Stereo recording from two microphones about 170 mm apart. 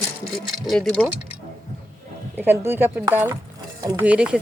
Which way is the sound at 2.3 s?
10° right (ahead or behind).